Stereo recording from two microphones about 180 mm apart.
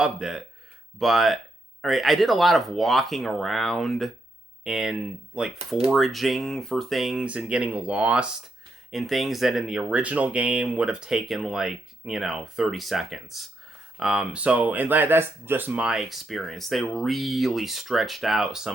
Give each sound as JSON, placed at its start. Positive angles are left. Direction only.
{"t": 0.0, "sound": "speech", "side_deg": -5}
{"t": 5.5, "sound": "speech", "side_deg": -35}
{"t": 5.9, "sound": "speech", "side_deg": 0}